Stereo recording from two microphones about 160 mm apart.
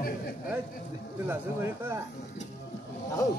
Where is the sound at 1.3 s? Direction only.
15° right (ahead or behind).